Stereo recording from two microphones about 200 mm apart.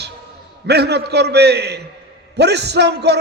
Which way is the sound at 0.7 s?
55° right (ahead or behind).